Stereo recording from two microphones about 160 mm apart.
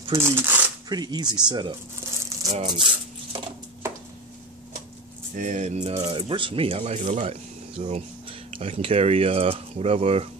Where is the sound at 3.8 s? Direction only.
15° right (ahead or behind).